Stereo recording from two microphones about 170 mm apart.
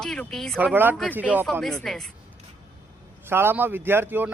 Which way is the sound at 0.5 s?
10° right (ahead or behind).